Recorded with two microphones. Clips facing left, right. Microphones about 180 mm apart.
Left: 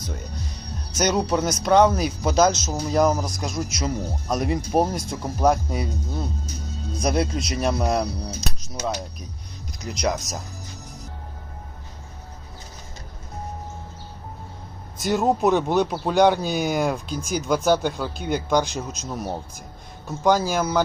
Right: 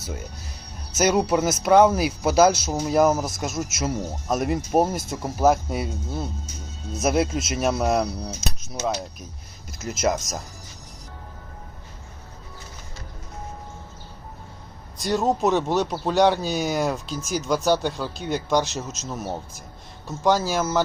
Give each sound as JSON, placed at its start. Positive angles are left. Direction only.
{"t": 0.0, "sound": "speech", "side_deg": -5}
{"t": 6.4, "sound": "music", "side_deg": 35}
{"t": 6.9, "sound": "speech", "side_deg": -5}
{"t": 15.3, "sound": "speech", "side_deg": 0}